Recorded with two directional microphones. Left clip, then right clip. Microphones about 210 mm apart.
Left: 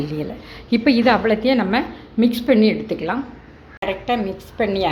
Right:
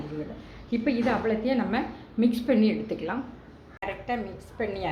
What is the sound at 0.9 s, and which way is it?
A woman's voice, 35° left (ahead or behind).